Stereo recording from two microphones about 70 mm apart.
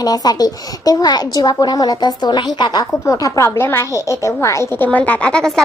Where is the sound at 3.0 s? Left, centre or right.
Left.